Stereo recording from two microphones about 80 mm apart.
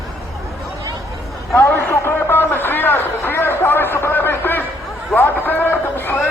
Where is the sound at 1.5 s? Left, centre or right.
Left.